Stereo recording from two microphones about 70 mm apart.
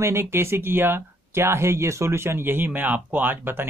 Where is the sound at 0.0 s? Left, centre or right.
Right.